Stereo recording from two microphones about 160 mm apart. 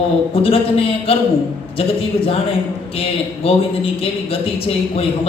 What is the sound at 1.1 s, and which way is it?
Speech, 35° left (ahead or behind).